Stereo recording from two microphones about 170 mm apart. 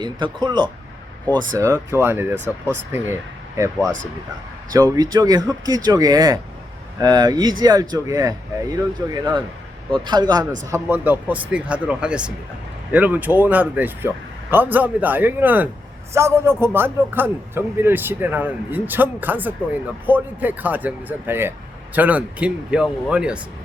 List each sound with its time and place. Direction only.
0.0 s speech: 25° right (ahead or behind)
1.5 s a man's voice: 15° right (ahead or behind)
10.7 s a man's voice: 15° right (ahead or behind)